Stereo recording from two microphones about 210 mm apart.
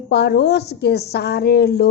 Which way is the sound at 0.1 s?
55° left (ahead or behind).